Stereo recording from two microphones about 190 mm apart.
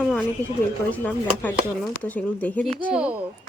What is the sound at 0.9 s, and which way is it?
Speech, 10° left (ahead or behind).